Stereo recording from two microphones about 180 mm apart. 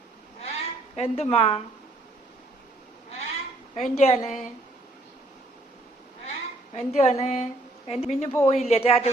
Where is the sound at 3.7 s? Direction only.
40° left (ahead or behind).